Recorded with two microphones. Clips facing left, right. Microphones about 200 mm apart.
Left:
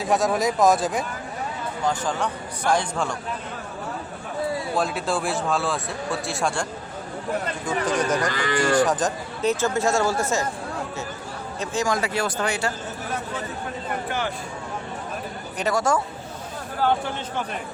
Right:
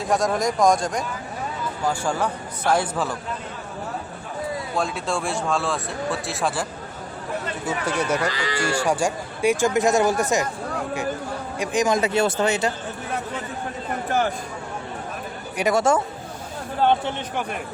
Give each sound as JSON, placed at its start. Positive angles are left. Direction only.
{"t": 0.0, "sound": "speech", "side_deg": 0}
{"t": 1.9, "sound": "speech", "side_deg": -10}
{"t": 4.7, "sound": "speech", "side_deg": 0}
{"t": 8.3, "sound": "speech", "side_deg": 50}
{"t": 8.5, "sound": "speech", "side_deg": -10}
{"t": 11.6, "sound": "speech", "side_deg": -15}
{"t": 14.1, "sound": "a sound", "side_deg": -45}
{"t": 15.7, "sound": "speech", "side_deg": -25}